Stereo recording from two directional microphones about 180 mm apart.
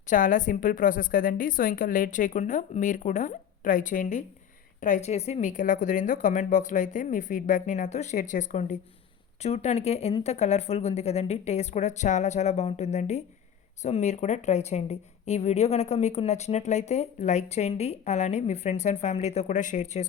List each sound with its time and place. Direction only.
0.1 s a woman's voice: 45° left (ahead or behind)